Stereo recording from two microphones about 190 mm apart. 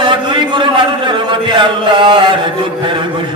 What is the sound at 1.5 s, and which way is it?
Chant, 25° right (ahead or behind).